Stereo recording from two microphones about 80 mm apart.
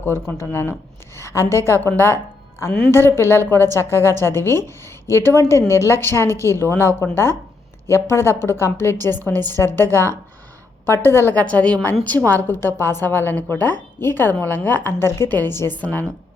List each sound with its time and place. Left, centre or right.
0.0 s a woman's voice: left
2.9 s a woman's voice: left
11.4 s a woman's voice: centre